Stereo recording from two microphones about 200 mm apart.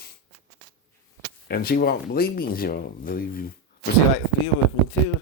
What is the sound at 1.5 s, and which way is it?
Speech, 50° left (ahead or behind).